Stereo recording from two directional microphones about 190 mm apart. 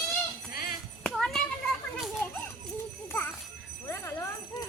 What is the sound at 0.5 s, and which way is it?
Music, 50° left (ahead or behind).